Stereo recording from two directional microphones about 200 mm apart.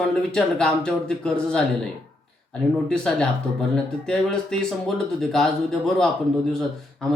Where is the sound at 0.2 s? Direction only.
5° left (ahead or behind).